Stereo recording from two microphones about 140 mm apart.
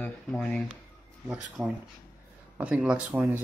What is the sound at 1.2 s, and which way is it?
Speech, 5° right (ahead or behind).